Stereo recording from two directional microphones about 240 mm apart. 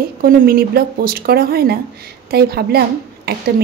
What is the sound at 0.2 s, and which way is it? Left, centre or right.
A woman's voice, right.